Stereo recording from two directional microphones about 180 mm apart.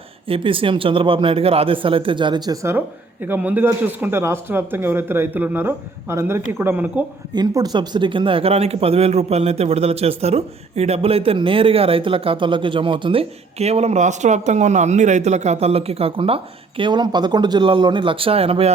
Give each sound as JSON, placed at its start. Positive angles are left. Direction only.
{"t": 0.3, "sound": "speech", "side_deg": -30}
{"t": 7.3, "sound": "speech", "side_deg": -20}